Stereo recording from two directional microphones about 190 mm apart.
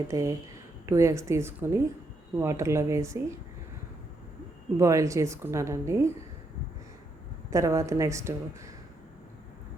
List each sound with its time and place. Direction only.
0.1 s a woman's voice: 15° right (ahead or behind)
4.8 s a woman's voice: 15° right (ahead or behind)
7.5 s a woman's voice: 15° right (ahead or behind)